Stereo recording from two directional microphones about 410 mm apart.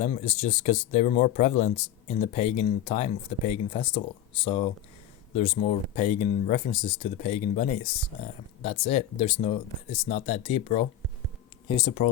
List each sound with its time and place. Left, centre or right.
0.0 s speech: centre